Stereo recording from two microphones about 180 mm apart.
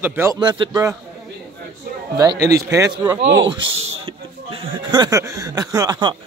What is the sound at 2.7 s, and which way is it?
Speech, 15° right (ahead or behind).